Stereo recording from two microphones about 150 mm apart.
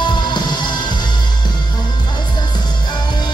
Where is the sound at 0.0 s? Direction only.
30° left (ahead or behind).